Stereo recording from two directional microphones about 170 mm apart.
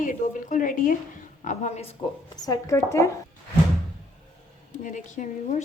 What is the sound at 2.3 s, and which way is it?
Speech, 20° left (ahead or behind).